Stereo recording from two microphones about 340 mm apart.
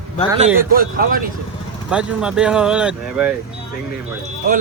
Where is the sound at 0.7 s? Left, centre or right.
Right.